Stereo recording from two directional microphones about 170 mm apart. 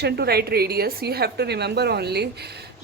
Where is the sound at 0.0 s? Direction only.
70° right (ahead or behind).